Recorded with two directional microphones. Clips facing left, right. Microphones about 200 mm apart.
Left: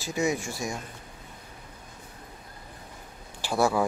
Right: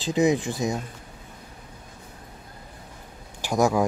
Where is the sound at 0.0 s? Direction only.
20° right (ahead or behind).